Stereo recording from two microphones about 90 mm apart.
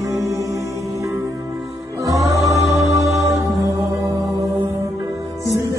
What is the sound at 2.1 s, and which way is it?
Music, 35° right (ahead or behind).